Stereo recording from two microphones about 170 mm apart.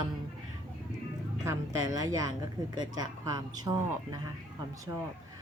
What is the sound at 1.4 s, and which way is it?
Speech, 20° right (ahead or behind).